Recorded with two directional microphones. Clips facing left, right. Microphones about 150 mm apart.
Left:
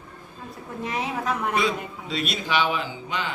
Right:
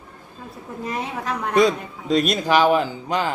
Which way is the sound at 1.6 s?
40° right (ahead or behind).